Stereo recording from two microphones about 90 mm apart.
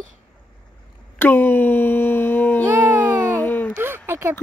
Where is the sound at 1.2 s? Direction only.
20° left (ahead or behind).